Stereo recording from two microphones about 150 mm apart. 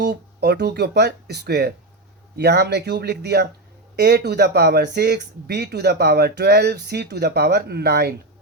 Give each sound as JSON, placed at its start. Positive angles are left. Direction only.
{"t": 0.0, "sound": "speech", "side_deg": -90}